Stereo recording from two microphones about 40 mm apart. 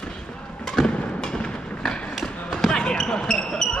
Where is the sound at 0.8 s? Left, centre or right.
Centre.